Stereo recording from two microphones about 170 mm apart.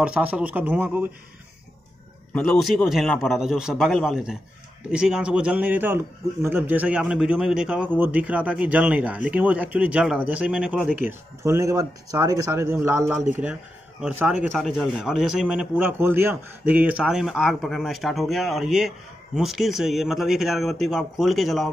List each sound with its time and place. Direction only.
0.0 s a man's voice: 10° right (ahead or behind)
2.3 s a man's voice: 5° left (ahead or behind)